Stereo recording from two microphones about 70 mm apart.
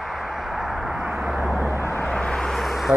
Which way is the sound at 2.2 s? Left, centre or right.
Centre.